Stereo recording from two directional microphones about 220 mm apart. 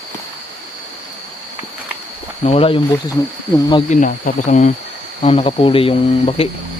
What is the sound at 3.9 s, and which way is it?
Speech, 35° left (ahead or behind).